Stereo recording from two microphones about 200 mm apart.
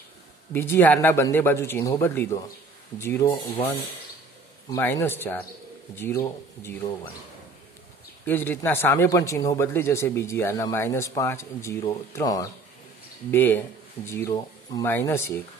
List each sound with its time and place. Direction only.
0.5 s speech: 10° left (ahead or behind)
4.6 s speech: 15° left (ahead or behind)
8.3 s speech: 10° left (ahead or behind)